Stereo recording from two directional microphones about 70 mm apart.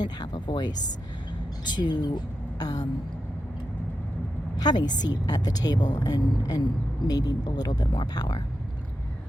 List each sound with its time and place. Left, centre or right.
0.0 s a sound: left
1.7 s speech: left
4.5 s speech: left